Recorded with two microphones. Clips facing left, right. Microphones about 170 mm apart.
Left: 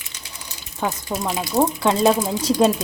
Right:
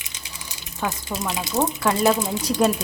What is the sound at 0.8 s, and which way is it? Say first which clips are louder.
Speech: left 3 dB; 15° left (ahead or behind).